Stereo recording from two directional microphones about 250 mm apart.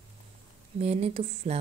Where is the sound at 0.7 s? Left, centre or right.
Right.